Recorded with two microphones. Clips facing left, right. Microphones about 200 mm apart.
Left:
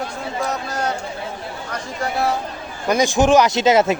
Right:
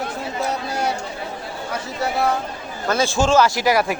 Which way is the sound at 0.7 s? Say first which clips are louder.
Even; 10° right (ahead or behind).